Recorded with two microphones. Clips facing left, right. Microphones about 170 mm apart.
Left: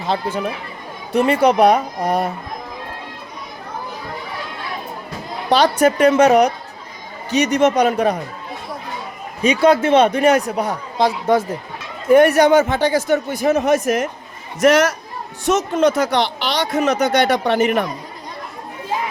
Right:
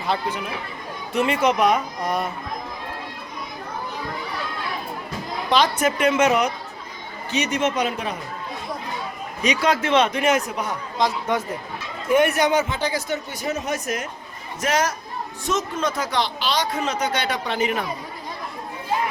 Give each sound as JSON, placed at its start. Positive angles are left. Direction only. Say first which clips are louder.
{"t": 1.1, "sound": "speech", "louder": "left 6 dB", "side_deg": 35}
{"t": 5.5, "sound": "speech", "louder": "left 6 dB", "side_deg": 35}
{"t": 9.4, "sound": "a man's voice", "louder": "left 7 dB", "side_deg": 30}
{"t": 12.8, "sound": "speech", "louder": "left 9 dB", "side_deg": 60}
{"t": 14.6, "sound": "speech", "louder": "left 9 dB", "side_deg": 75}